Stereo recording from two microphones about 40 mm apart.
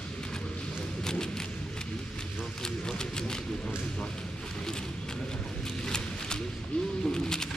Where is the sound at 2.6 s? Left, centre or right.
Centre.